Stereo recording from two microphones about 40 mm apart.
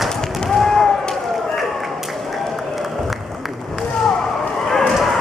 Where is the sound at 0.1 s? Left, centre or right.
Centre.